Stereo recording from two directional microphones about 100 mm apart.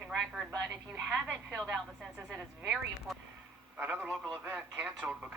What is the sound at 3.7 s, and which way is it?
Speech, 15° right (ahead or behind).